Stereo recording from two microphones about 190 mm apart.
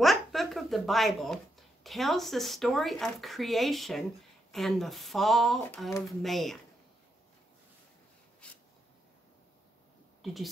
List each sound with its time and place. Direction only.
0.0 s speech: centre (ahead or behind)
8.4 s a sound: 5° left (ahead or behind)
10.2 s a woman's voice: centre (ahead or behind)